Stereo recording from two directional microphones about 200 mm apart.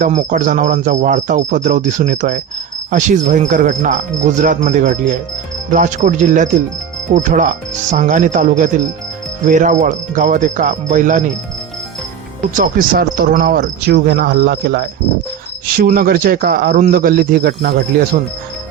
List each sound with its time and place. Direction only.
0.0 s a man's voice: 35° right (ahead or behind)
12.5 s speech: 45° right (ahead or behind)